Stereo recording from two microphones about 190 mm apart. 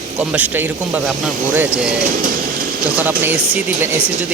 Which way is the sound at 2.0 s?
45° right (ahead or behind).